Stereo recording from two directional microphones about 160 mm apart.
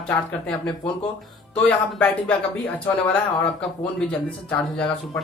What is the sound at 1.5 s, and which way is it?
Speech, 10° left (ahead or behind).